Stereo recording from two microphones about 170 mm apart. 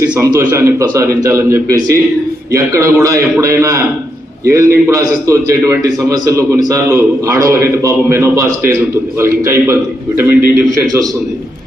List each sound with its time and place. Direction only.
0.2 s a man's voice: 15° right (ahead or behind)